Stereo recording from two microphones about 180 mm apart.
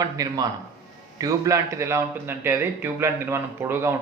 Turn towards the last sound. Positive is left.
turn(degrees=-15)  # may be behind; listen again after turning